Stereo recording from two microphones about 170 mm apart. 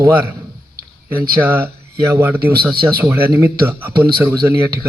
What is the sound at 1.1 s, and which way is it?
Speech, 10° right (ahead or behind).